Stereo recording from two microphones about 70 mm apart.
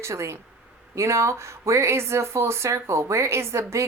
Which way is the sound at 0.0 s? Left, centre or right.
Right.